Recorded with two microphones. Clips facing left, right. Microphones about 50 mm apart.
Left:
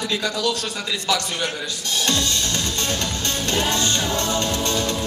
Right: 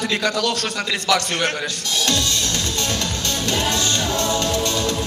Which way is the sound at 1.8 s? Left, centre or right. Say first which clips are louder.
Even; left.